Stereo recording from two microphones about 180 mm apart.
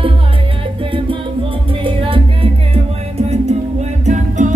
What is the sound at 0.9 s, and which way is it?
Music, 30° right (ahead or behind).